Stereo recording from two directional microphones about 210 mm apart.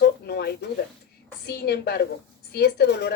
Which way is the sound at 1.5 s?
50° left (ahead or behind).